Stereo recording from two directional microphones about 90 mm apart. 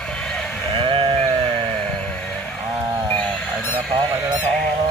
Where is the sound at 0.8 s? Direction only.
85° right.